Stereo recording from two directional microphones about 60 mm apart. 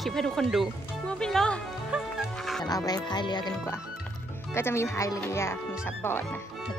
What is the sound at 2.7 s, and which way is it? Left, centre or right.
Speech, left.